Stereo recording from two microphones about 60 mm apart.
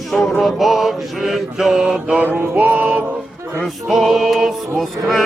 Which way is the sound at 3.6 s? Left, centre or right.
Centre.